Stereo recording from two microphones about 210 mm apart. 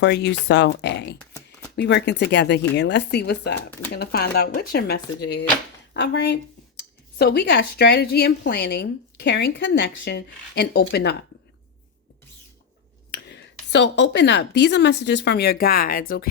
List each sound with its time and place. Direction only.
0.0 s a woman's voice: 55° left (ahead or behind)
13.1 s speech: 55° left (ahead or behind)